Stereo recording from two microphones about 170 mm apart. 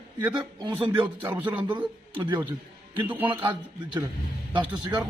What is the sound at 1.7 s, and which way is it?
Speech, 25° right (ahead or behind).